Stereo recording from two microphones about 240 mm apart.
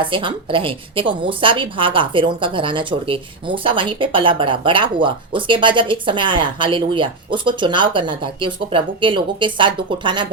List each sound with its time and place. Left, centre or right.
0.0 s a woman's voice: right